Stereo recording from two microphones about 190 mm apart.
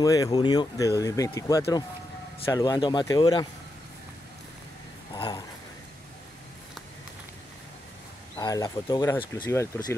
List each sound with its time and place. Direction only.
0.0 s speech: 20° left (ahead or behind)
5.1 s a sound: 20° left (ahead or behind)
8.4 s speech: 20° left (ahead or behind)